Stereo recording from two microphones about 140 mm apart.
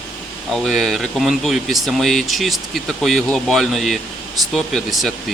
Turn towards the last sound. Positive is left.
turn(degrees=0)  # may be behind; listen again after turning